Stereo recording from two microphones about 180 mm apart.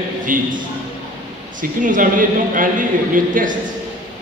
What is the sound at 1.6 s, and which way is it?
A woman's voice, 45° right (ahead or behind).